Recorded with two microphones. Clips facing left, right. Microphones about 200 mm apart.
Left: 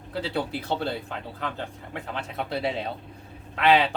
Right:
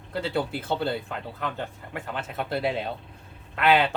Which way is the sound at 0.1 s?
Centre (ahead or behind).